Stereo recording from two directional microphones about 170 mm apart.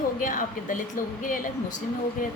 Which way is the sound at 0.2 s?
50° left (ahead or behind).